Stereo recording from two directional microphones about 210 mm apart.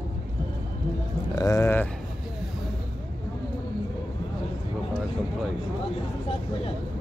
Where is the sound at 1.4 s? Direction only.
15° left (ahead or behind).